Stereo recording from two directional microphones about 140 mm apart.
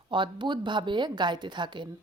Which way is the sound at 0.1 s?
35° right (ahead or behind).